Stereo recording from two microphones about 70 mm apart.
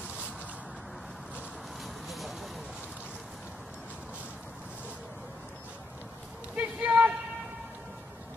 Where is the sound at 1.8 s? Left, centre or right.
Centre.